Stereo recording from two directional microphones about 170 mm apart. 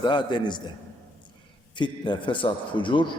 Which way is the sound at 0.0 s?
25° left (ahead or behind).